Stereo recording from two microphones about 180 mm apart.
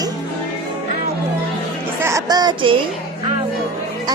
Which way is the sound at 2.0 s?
20° right (ahead or behind).